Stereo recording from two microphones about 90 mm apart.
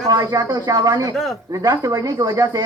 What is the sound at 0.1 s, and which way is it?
Speech, 45° right (ahead or behind).